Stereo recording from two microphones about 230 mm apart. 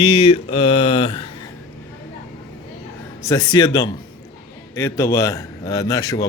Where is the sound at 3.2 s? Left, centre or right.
Centre.